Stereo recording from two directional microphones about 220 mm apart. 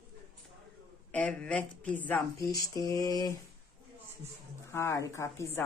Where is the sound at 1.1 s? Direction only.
5° left (ahead or behind).